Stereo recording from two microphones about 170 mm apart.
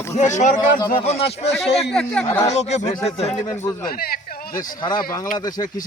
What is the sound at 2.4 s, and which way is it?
Speech, 40° left (ahead or behind).